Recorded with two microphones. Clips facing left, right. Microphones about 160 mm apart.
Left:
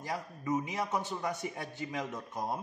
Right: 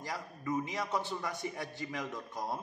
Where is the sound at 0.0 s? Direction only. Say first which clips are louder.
Left 2 dB; 20° left (ahead or behind).